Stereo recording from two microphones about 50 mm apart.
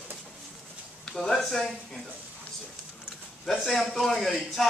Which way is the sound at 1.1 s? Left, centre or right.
Centre.